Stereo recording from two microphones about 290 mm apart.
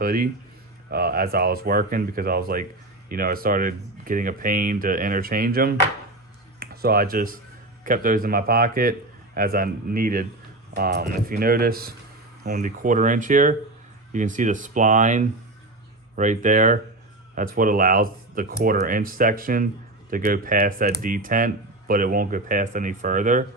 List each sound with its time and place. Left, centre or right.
0.0 s speech: right